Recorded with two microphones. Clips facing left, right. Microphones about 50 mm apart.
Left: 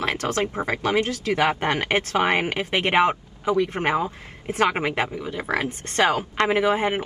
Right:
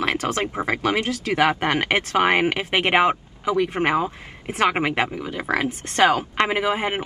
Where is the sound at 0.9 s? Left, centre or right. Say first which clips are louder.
Left 1 dB; right.